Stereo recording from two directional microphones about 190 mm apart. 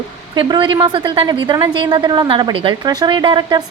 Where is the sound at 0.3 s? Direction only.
25° right (ahead or behind).